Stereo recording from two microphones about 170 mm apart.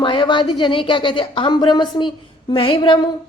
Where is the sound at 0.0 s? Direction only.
30° left (ahead or behind).